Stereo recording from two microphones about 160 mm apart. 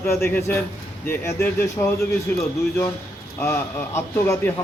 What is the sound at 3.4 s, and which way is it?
Speech, 15° left (ahead or behind).